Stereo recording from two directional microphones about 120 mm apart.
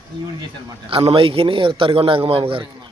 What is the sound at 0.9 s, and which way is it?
A man's voice, 50° right (ahead or behind).